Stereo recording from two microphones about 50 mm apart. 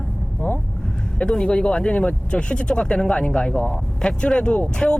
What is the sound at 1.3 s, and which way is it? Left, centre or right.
Speech, centre.